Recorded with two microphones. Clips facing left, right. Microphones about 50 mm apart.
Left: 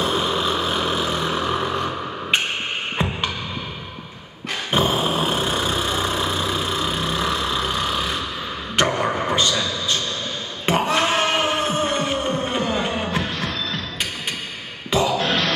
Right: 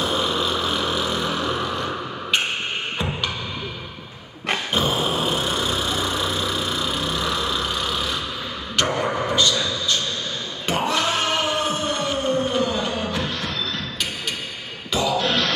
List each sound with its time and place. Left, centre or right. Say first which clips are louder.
0.0 s vehicle: left 1 dB; left
4.7 s dog: left 4 dB; left
7.0 s vehicle: left 2 dB; left
8.7 s a sound: left 2 dB; left
10.7 s music: left 3 dB; left
14.9 s music: left 2 dB; left